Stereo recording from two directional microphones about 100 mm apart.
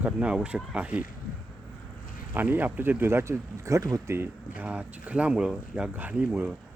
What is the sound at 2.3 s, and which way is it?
Speech, 15° right (ahead or behind).